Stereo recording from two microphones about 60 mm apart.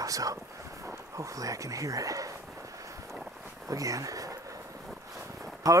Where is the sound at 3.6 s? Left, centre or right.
Right.